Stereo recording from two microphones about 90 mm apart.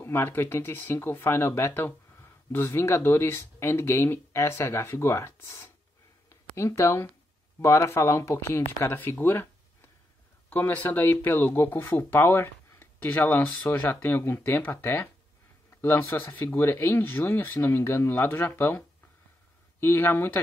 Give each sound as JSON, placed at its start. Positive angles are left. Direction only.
{"t": 0.0, "sound": "speech", "side_deg": 25}
{"t": 6.2, "sound": "a sound", "side_deg": 30}
{"t": 7.6, "sound": "speech", "side_deg": 30}
{"t": 10.5, "sound": "speech", "side_deg": 20}
{"t": 19.8, "sound": "speech", "side_deg": 25}